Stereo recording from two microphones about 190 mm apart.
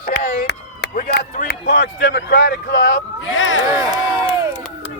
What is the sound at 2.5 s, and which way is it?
Speech, 75° left (ahead or behind).